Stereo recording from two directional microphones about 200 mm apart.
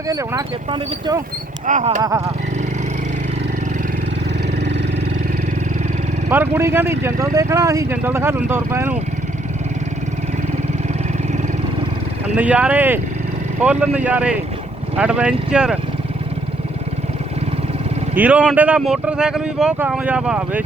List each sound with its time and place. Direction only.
0.1 s speech: 15° right (ahead or behind)
1.6 s speech: 40° right (ahead or behind)
2.0 s speech: 15° right (ahead or behind)
6.2 s speech: 10° right (ahead or behind)
12.4 s speech: 5° right (ahead or behind)
18.2 s speech: 5° right (ahead or behind)